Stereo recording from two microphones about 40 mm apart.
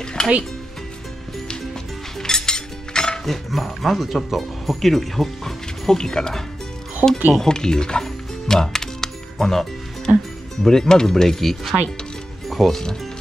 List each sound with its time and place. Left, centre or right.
0.0 s music: centre
2.1 s music: centre
3.3 s speech: centre
7.0 s speech: centre
7.4 s speech: centre
8.0 s music: centre
10.6 s speech: centre